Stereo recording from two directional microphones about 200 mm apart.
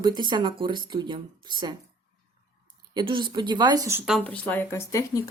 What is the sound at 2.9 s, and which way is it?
Speech, 25° right (ahead or behind).